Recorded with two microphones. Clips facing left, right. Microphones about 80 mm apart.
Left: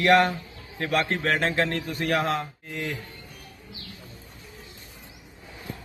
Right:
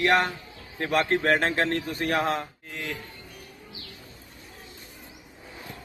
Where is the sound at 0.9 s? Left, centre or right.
Right.